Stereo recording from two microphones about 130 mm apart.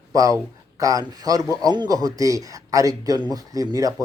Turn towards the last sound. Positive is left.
turn(degrees=-30)  # may be behind; listen again after turning